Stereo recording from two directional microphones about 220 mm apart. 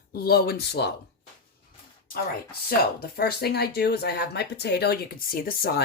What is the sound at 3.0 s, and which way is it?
Speech, 45° left (ahead or behind).